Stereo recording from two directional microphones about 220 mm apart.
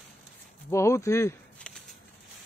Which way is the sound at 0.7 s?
15° left (ahead or behind).